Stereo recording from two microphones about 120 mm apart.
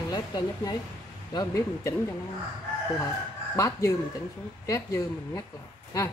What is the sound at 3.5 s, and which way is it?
Speech, 25° left (ahead or behind).